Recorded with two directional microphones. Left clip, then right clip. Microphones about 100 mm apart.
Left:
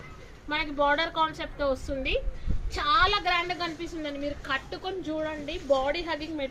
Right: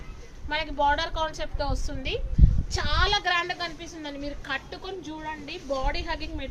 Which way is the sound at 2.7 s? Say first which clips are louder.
Left 3 dB; 55° right (ahead or behind).